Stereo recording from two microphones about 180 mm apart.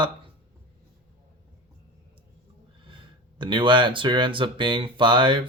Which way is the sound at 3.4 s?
25° right (ahead or behind).